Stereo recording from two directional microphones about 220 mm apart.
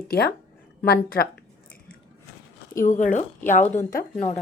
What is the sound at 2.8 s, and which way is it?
A woman's voice, 35° left (ahead or behind).